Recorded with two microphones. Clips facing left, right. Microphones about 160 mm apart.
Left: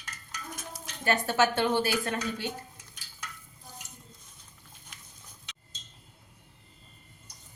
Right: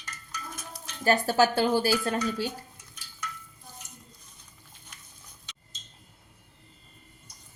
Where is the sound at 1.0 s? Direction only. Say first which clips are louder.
Right 3 dB; 35° right (ahead or behind).